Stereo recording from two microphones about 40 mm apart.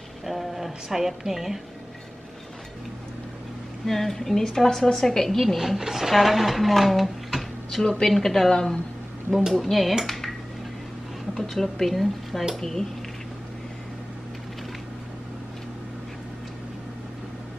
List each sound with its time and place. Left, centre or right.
0.2 s a sound: centre
3.8 s a woman's voice: centre
5.4 s speech: centre
7.9 s a woman's voice: centre
8.5 s speech: centre
9.5 s speech: centre
10.0 s a sound: centre
11.5 s a woman's voice: centre